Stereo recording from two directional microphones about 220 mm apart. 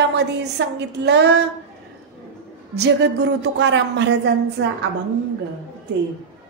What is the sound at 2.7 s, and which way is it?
A woman's voice, 50° right (ahead or behind).